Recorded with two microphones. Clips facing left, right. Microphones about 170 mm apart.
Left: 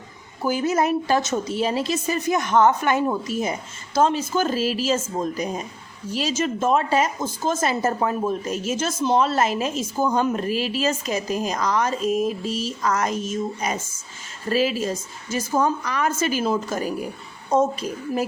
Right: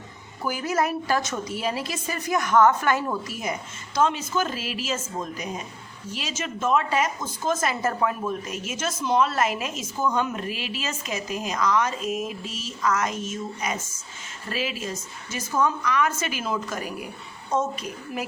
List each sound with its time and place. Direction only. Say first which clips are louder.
0.4 s a woman's voice: left 4 dB; 25° left (ahead or behind)
3.9 s speech: left 3 dB; 35° left (ahead or behind)